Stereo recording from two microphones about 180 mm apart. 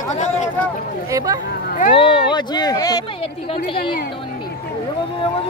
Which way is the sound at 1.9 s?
30° left (ahead or behind).